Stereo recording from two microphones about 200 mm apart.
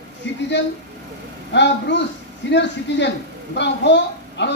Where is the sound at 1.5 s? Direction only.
60° left (ahead or behind).